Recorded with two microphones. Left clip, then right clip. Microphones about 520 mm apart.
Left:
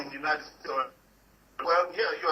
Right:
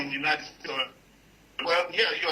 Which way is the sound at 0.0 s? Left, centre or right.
Right.